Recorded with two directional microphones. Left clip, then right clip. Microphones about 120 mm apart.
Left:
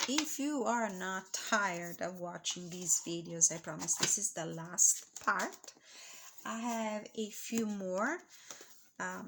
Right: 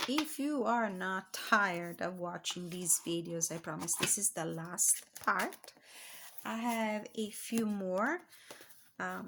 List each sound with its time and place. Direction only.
0.2 s speech: 5° right (ahead or behind); by 3.3 s 35° right (ahead or behind)
3.3 s speech: 25° right (ahead or behind)
4.1 s speech: 30° right (ahead or behind); by 9.2 s 10° right (ahead or behind)